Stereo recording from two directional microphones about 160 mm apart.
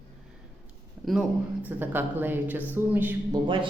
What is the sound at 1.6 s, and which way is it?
A woman's voice, 10° right (ahead or behind).